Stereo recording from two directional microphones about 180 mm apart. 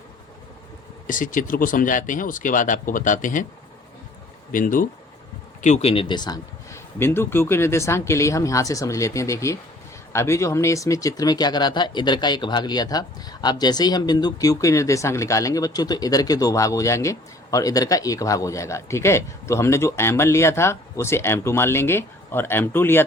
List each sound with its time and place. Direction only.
1.0 s speech: 45° left (ahead or behind)
4.5 s speech: 50° left (ahead or behind)
5.6 s speech: 35° left (ahead or behind); by 23.0 s 10° left (ahead or behind)